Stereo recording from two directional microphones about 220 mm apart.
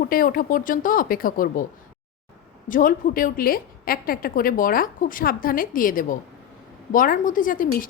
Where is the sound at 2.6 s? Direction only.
40° left (ahead or behind).